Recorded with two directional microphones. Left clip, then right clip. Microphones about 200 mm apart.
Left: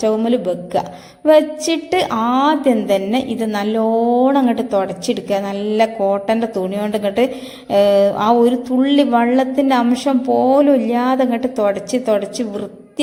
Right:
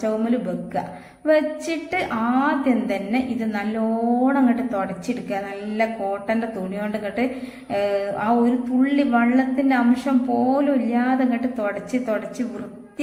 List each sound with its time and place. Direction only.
0.0 s a woman's voice: 35° left (ahead or behind)